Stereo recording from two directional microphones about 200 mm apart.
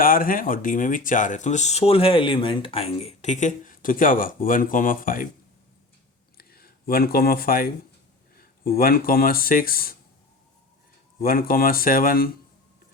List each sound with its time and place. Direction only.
0.0 s speech: 45° left (ahead or behind)
6.3 s a sound: 50° left (ahead or behind)
8.4 s speech: 45° left (ahead or behind)
11.2 s speech: 45° left (ahead or behind)